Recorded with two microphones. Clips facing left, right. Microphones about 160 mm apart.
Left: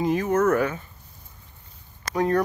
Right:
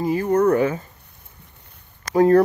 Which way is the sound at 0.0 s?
10° right (ahead or behind).